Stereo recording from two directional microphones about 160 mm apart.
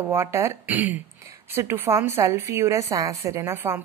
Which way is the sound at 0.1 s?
15° right (ahead or behind).